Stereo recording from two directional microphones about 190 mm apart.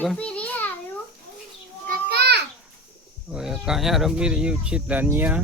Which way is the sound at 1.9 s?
55° right (ahead or behind).